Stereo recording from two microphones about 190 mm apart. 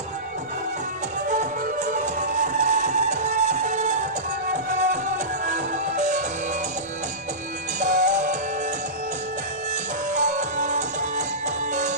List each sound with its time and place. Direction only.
1.3 s music: 40° right (ahead or behind)
7.8 s music: 40° right (ahead or behind)
10.1 s music: 40° right (ahead or behind)